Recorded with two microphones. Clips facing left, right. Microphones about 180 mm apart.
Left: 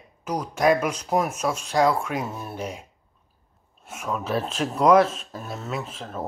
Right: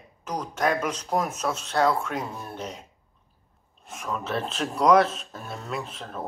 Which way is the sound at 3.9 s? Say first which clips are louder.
Left 3 dB; 10° left (ahead or behind).